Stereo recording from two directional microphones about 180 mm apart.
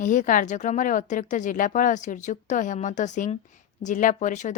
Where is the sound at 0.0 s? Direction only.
45° left (ahead or behind).